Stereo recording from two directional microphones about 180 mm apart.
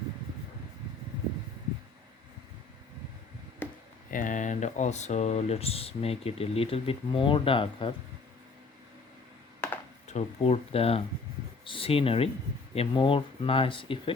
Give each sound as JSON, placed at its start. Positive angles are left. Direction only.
{"t": 3.6, "sound": "chop", "side_deg": 10}
{"t": 4.1, "sound": "speech", "side_deg": 45}
{"t": 9.6, "sound": "a sound", "side_deg": 10}
{"t": 10.1, "sound": "speech", "side_deg": 40}